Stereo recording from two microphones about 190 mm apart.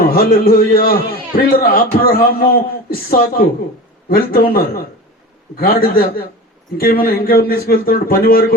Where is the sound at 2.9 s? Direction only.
50° left (ahead or behind).